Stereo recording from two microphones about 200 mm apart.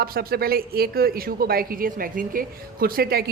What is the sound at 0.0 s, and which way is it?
Speech, 50° right (ahead or behind).